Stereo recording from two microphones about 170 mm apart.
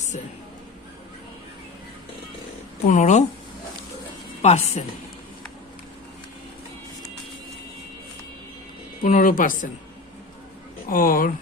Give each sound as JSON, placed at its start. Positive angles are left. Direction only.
{"t": 2.8, "sound": "speech", "side_deg": 45}
{"t": 4.4, "sound": "a woman's voice", "side_deg": 40}
{"t": 9.0, "sound": "speech", "side_deg": 50}
{"t": 10.8, "sound": "speech", "side_deg": 55}